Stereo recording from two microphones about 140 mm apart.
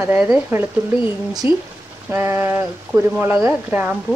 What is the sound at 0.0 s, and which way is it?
Speech, 15° right (ahead or behind).